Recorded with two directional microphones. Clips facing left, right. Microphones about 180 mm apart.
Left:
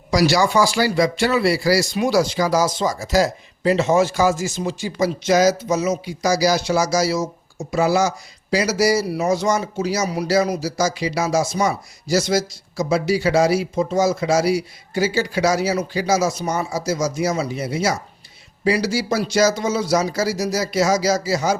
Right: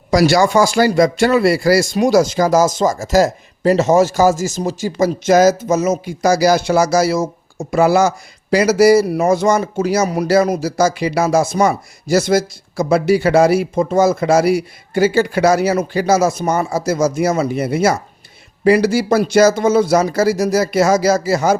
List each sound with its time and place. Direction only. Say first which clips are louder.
0.1 s a man's voice: right 5 dB; 50° right (ahead or behind)